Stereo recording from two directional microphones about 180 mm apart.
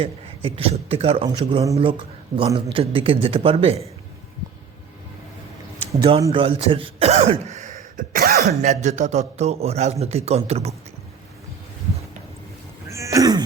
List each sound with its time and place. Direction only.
0.0 s a man's voice: 35° right (ahead or behind)
6.0 s a man's voice: 30° right (ahead or behind); by 8.7 s 60° right (ahead or behind)
8.7 s a man's voice: 40° right (ahead or behind)
12.9 s cat: 15° right (ahead or behind)